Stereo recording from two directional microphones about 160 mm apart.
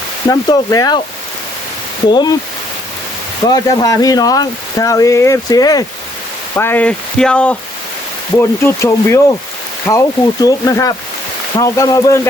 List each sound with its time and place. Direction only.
0.3 s speech: 25° left (ahead or behind)
2.0 s speech: 25° left (ahead or behind)
3.5 s speech: 25° left (ahead or behind)
6.6 s speech: 10° left (ahead or behind)
8.4 s speech: 15° left (ahead or behind)